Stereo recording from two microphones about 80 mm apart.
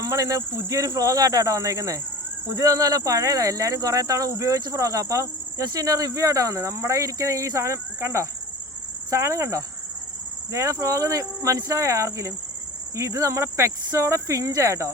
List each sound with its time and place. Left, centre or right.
0.0 s speech: right